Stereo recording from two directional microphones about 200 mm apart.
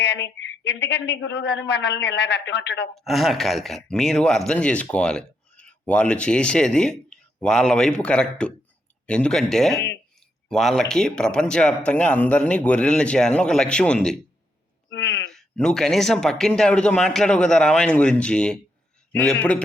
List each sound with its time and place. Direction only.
0.0 s a woman's voice: 60° left (ahead or behind)
2.9 s speech: centre (ahead or behind)
14.8 s a sound: 60° left (ahead or behind)
15.3 s speech: 5° left (ahead or behind)